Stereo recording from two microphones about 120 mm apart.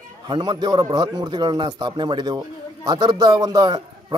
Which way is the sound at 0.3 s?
35° right (ahead or behind).